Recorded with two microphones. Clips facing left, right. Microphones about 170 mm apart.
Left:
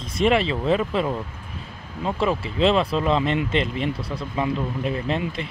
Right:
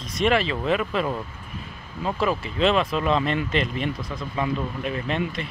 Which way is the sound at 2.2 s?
25° left (ahead or behind).